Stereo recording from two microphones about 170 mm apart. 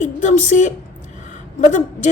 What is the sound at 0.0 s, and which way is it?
A woman's voice, 45° left (ahead or behind).